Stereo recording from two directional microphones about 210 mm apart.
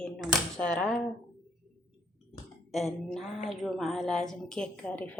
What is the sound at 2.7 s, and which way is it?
A woman's voice, centre (ahead or behind).